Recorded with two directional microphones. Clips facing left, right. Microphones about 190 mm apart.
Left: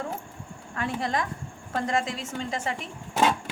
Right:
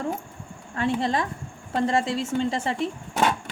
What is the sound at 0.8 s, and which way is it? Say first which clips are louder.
A woman's voice: right 4 dB; 25° right (ahead or behind).